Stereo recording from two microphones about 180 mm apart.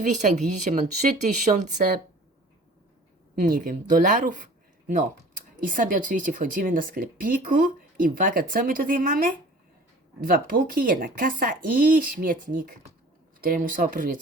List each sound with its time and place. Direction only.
0.0 s speech: 45° right (ahead or behind)
3.4 s speech: 50° right (ahead or behind)
5.5 s speech: 50° right (ahead or behind)